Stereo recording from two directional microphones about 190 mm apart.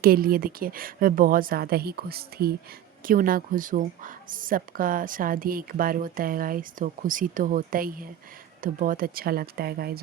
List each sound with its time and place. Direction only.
0.0 s a woman's voice: 50° right (ahead or behind)